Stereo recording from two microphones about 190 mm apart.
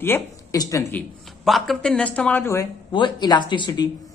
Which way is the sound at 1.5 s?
Centre (ahead or behind).